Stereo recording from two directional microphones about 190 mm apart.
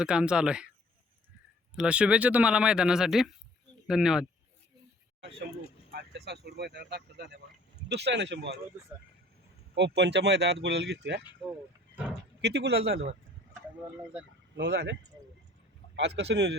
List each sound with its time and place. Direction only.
0.0 s speech: 5° right (ahead or behind)
1.7 s speech: 5° right (ahead or behind)
5.9 s speech: 60° right (ahead or behind)
9.7 s speech: 65° right (ahead or behind)
12.4 s speech: 65° right (ahead or behind)
14.5 s speech: 60° right (ahead or behind)
16.0 s speech: 65° right (ahead or behind)